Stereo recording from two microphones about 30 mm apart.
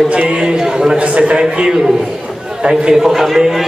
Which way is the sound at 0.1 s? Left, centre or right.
Right.